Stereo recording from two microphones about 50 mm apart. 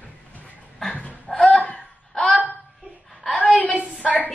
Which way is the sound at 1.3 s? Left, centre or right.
Centre.